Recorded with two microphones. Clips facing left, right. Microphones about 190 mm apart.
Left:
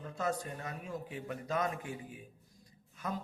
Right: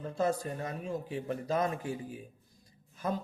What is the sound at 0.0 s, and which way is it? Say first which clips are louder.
A man's voice: right 5 dB; 30° right (ahead or behind).